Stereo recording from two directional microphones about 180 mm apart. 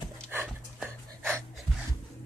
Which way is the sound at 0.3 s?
10° right (ahead or behind).